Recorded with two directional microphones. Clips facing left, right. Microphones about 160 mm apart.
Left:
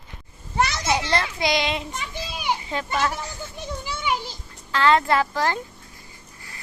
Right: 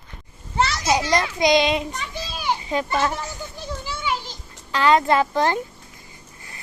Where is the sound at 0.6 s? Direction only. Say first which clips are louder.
Right 1 dB; 20° left (ahead or behind).